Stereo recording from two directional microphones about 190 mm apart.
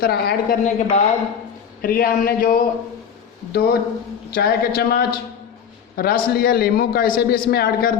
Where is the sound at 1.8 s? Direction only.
50° left (ahead or behind).